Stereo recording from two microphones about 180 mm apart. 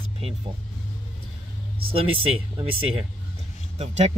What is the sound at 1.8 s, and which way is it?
Speech, 30° right (ahead or behind).